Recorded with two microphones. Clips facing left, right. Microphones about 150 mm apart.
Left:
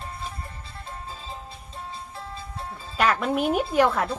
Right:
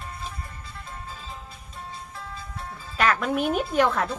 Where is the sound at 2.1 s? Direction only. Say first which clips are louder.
Left 2 dB; 30° left (ahead or behind).